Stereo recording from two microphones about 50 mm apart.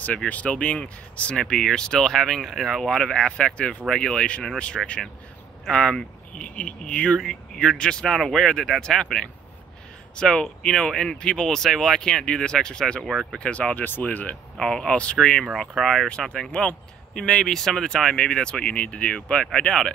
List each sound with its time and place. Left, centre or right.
0.0 s speech: left
1.4 s speech: centre
3.2 s speech: centre
7.2 s speech: centre
8.0 s speech: centre; by 14.3 s left
14.6 s speech: centre
15.0 s speech: left
15.8 s speech: centre
16.1 s speech: centre